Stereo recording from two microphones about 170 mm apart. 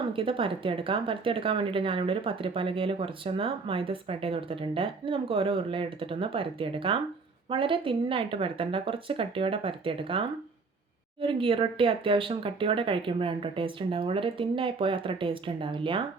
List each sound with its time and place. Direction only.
0.1 s speech: 30° right (ahead or behind)